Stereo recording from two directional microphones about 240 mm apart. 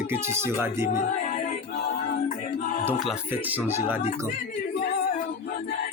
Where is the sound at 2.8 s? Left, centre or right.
Centre.